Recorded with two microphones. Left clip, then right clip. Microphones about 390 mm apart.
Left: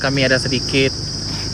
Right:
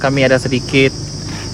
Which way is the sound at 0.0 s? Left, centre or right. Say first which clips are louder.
Right 4 dB; centre.